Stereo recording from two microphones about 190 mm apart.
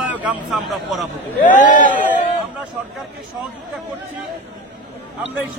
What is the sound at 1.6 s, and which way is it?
Speech, 40° left (ahead or behind).